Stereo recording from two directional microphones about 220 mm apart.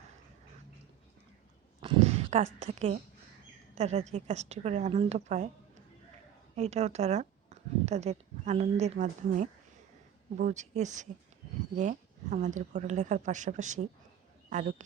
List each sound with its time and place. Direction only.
1.8 s a woman's voice: 25° right (ahead or behind)